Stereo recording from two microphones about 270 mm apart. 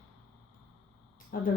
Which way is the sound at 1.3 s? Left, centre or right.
Left.